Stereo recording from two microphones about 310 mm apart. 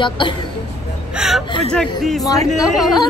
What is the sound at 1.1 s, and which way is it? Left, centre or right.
Speech, centre.